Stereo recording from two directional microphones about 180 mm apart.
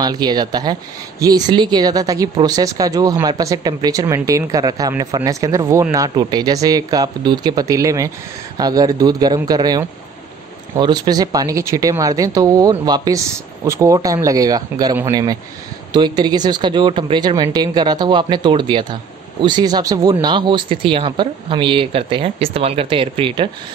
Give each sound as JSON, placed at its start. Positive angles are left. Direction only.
{"t": 0.0, "sound": "speech", "side_deg": -25}